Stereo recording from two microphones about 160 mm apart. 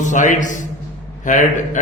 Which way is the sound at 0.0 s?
50° left (ahead or behind).